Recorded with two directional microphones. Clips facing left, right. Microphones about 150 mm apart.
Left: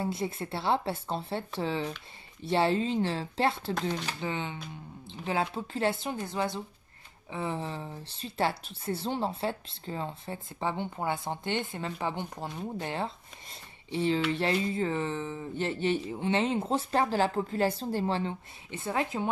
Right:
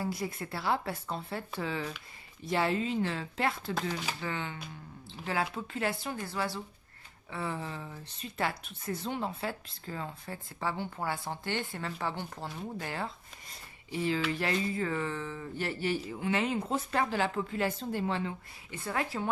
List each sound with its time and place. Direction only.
0.0 s speech: 25° left (ahead or behind)